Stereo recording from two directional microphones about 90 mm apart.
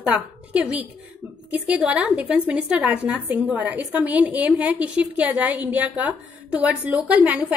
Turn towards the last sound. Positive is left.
turn(degrees=-15)  # may be behind; listen again after turning